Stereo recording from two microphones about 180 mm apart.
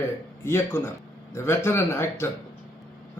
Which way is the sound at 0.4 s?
15° left (ahead or behind).